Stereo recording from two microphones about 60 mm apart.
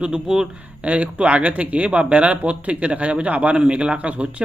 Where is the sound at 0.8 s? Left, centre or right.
Right.